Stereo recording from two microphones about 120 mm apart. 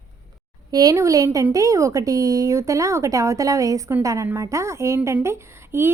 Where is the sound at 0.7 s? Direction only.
30° right (ahead or behind).